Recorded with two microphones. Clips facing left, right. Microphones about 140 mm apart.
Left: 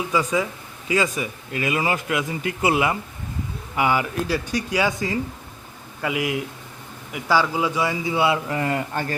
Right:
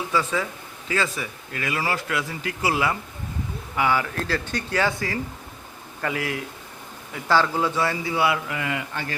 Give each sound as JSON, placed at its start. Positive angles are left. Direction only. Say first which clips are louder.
{"t": 0.1, "sound": "a man's voice", "louder": "left 2 dB", "side_deg": 15}